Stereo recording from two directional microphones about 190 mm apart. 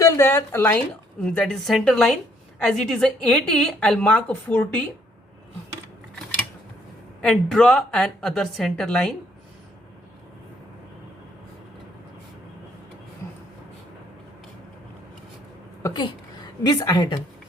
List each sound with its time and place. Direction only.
0.0 s a woman's voice: 15° left (ahead or behind)
7.2 s a woman's voice: 5° left (ahead or behind)
15.8 s a woman's voice: 20° left (ahead or behind)